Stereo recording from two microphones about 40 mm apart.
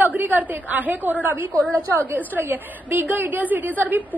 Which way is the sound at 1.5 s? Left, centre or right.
Left.